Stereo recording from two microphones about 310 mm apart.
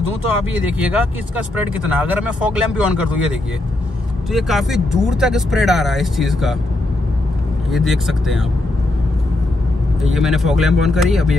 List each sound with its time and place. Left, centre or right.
0.7 s speech: centre
7.7 s speech: centre
10.1 s speech: centre